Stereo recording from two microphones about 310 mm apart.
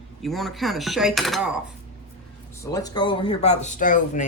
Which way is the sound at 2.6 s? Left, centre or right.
Centre.